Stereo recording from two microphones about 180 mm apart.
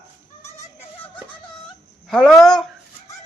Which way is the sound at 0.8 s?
10° left (ahead or behind).